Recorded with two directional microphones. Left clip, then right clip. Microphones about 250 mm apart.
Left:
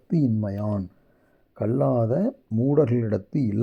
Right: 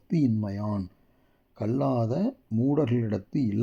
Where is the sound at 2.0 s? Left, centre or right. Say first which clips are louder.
Left 5 dB; centre.